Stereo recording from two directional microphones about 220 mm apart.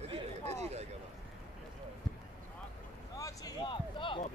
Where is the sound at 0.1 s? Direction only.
30° right (ahead or behind).